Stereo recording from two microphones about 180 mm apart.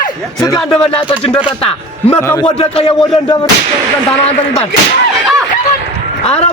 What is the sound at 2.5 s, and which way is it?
Speech, 30° left (ahead or behind).